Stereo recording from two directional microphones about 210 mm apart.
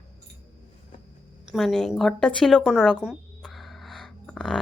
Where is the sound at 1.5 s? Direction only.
Centre (ahead or behind).